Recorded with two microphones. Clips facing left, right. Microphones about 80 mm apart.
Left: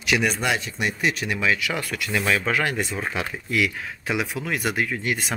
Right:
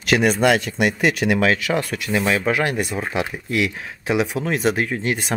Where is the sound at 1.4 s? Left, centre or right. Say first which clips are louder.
Right 5 dB; right.